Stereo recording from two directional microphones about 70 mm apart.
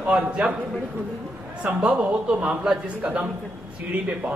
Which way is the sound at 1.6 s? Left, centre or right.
Centre.